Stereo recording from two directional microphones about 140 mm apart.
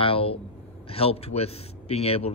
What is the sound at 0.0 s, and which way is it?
A man's voice, 45° left (ahead or behind).